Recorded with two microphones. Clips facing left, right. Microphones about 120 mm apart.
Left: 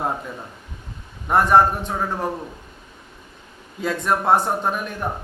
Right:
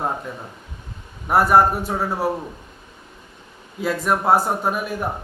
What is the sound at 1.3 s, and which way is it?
A man's voice, 5° right (ahead or behind).